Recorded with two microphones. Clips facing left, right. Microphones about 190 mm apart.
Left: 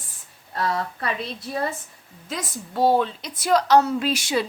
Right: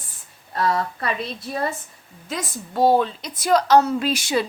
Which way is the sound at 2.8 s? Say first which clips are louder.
Right 2 dB; 40° right (ahead or behind).